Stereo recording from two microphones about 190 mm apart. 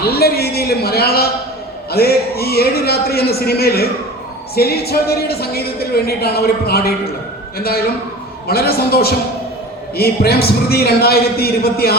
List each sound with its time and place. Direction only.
0.0 s a man's voice: 55° left (ahead or behind)